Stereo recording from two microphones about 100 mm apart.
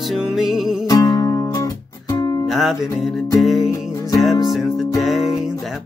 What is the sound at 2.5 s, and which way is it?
Music, 5° right (ahead or behind).